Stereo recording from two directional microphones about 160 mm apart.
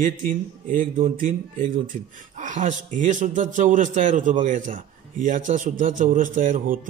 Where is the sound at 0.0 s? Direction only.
55° right (ahead or behind).